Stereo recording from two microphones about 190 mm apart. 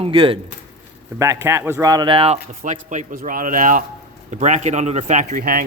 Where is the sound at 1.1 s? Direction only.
15° right (ahead or behind); by 2.4 s 30° right (ahead or behind).